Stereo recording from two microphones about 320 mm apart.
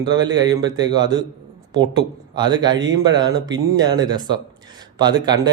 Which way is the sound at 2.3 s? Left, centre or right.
Centre.